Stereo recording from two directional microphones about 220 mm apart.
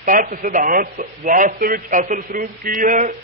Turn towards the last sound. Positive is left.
turn(degrees=-35)  # may be behind; listen again after turning